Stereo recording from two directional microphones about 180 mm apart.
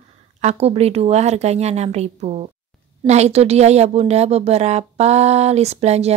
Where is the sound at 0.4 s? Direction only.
35° right (ahead or behind).